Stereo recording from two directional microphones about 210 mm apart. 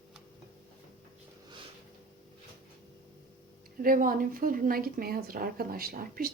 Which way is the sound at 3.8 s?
40° right (ahead or behind).